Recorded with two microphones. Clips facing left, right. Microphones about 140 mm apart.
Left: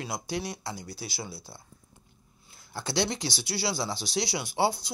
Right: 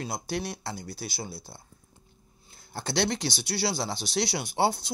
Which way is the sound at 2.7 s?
55° right (ahead or behind).